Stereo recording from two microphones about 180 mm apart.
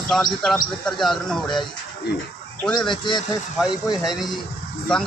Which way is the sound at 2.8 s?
25° left (ahead or behind).